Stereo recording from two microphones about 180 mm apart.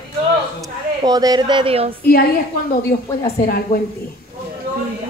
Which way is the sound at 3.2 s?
55° left (ahead or behind).